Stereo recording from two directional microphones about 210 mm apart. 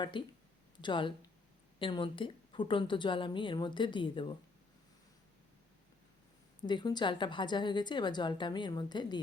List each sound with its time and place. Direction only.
0.0 s a woman's voice: 20° left (ahead or behind)
6.6 s a woman's voice: 20° left (ahead or behind)